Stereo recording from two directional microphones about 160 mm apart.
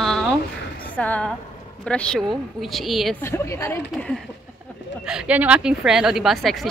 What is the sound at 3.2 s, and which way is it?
Speech, 15° left (ahead or behind).